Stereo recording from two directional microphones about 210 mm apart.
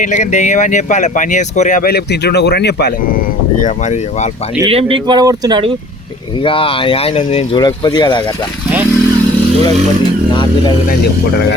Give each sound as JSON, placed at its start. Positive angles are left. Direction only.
{"t": 0.0, "sound": "speech", "side_deg": 35}
{"t": 4.6, "sound": "speech", "side_deg": -25}
{"t": 6.4, "sound": "speech", "side_deg": 25}